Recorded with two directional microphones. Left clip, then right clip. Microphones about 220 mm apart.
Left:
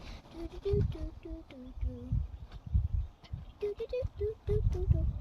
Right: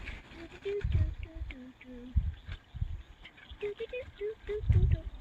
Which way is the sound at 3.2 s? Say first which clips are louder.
Left 1 dB; 25° left (ahead or behind).